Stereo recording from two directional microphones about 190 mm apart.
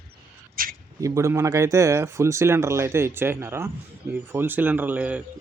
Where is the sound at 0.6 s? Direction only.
50° right (ahead or behind).